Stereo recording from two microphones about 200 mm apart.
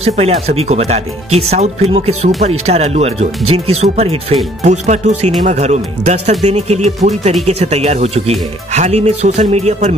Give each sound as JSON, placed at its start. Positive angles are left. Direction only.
{"t": 0.0, "sound": "speech", "side_deg": -30}